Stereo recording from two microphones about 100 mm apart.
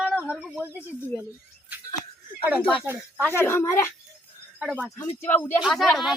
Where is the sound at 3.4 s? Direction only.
25° left (ahead or behind).